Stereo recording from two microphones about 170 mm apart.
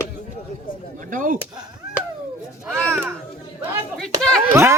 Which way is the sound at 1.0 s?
50° right (ahead or behind).